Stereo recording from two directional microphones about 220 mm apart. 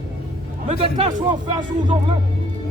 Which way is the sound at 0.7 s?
25° right (ahead or behind).